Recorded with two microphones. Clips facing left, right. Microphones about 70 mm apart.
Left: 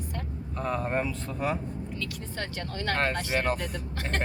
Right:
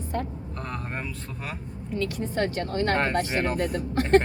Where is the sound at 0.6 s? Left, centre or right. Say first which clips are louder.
Left 6 dB; centre.